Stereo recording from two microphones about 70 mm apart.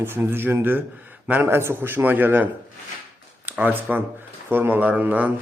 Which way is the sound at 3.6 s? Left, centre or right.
Right.